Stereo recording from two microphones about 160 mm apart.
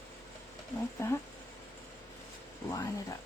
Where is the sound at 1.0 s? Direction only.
15° left (ahead or behind).